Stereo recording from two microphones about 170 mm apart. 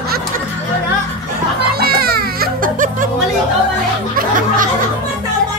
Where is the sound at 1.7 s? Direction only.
65° right (ahead or behind).